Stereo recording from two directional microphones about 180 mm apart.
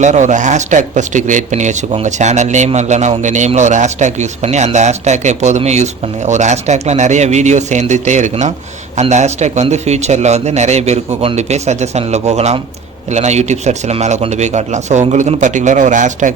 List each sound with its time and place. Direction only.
0.0 s speech: 40° right (ahead or behind)